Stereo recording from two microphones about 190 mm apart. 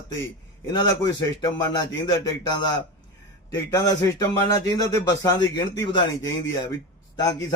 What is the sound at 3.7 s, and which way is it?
A man's voice, 20° left (ahead or behind).